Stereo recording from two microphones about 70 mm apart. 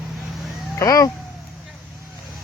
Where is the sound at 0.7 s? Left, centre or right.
Left.